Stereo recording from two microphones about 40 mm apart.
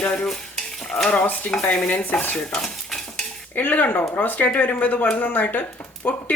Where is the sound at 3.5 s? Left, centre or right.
Left.